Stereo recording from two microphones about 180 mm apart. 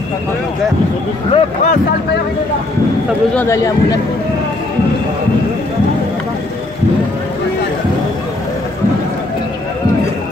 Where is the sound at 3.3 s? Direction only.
15° left (ahead or behind).